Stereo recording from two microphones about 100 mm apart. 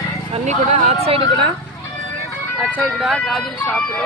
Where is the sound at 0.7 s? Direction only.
85° right.